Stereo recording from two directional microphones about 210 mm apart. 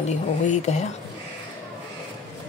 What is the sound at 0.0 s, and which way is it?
Speech, 35° left (ahead or behind).